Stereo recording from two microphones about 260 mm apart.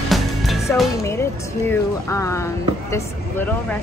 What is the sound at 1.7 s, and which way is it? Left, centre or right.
Speech, centre.